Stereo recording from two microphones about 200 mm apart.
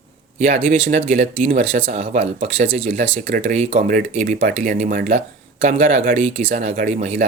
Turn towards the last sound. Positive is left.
turn(degrees=-35)  # may be behind; listen again after turning